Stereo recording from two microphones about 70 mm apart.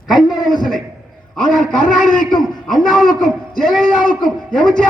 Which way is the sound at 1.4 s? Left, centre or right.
Centre.